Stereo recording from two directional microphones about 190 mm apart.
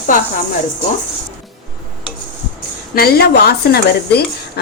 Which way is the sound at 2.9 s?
55° left (ahead or behind).